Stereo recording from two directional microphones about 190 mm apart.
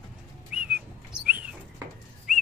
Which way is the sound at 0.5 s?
5° right (ahead or behind).